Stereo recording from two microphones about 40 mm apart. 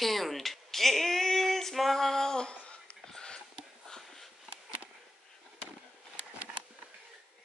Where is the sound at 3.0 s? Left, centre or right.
Centre.